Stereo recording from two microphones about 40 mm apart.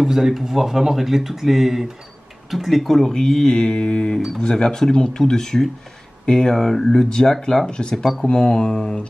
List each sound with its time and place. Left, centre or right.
0.0 s speech: centre; by 6.5 s left
6.5 s speech: centre
6.9 s speech: centre
8.3 s speech: centre